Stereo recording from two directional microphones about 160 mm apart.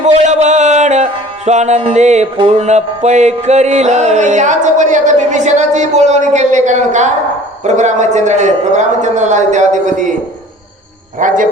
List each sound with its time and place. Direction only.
0.0 s music: 45° right (ahead or behind)
11.2 s speech: 55° right (ahead or behind)